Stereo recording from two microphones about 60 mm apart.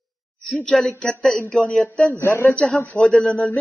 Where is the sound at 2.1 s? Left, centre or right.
Left.